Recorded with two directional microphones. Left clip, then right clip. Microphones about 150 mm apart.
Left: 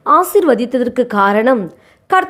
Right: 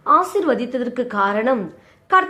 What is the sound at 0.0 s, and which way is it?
A woman's voice, 45° left (ahead or behind).